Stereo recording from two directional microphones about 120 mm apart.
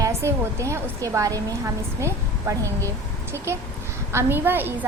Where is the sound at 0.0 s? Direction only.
25° right (ahead or behind).